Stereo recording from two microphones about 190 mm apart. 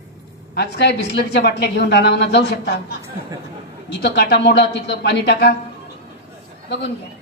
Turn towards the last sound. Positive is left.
turn(degrees=65)  # may be behind; listen again after turning